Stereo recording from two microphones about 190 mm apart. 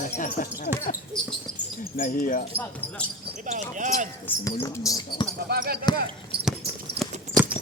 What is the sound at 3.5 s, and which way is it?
Speech, 40° right (ahead or behind).